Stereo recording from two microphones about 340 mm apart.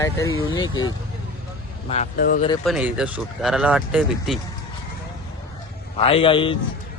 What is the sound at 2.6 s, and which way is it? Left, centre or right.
Speech, centre.